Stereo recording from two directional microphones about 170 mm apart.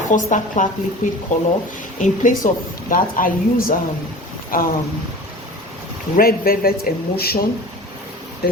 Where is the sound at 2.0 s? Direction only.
50° left (ahead or behind).